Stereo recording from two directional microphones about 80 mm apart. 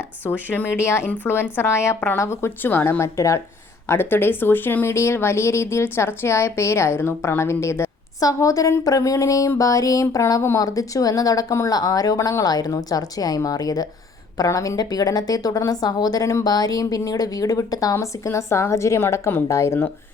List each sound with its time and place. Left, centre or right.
0.3 s a woman's voice: left
0.8 s a woman's voice: left
17.9 s speech: left